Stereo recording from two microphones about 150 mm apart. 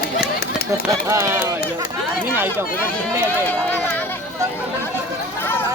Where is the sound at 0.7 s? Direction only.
20° right (ahead or behind).